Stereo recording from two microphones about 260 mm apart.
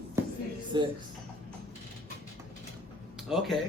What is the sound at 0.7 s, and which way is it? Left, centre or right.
Speech, centre.